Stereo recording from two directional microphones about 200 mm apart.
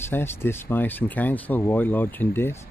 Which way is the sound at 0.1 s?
10° left (ahead or behind).